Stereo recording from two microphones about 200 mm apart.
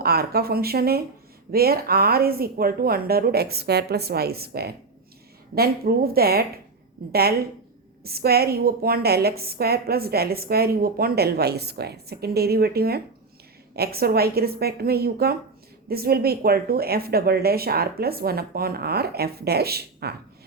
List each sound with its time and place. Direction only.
0.0 s a woman's voice: 50° right (ahead or behind)